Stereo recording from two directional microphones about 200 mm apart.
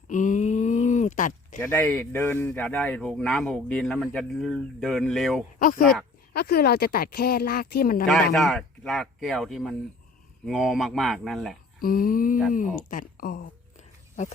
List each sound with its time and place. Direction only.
0.1 s a sound: 40° left (ahead or behind)
1.5 s speech: 10° left (ahead or behind)
5.5 s speech: 45° left (ahead or behind)
8.3 s speech: centre (ahead or behind)
11.8 s speech: 45° left (ahead or behind)